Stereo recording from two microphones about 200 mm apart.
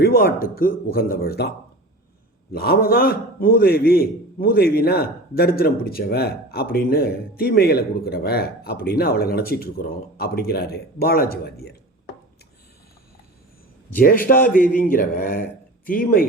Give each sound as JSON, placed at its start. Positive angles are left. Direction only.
{"t": 0.0, "sound": "a man's voice", "side_deg": 50}
{"t": 13.9, "sound": "a man's voice", "side_deg": 45}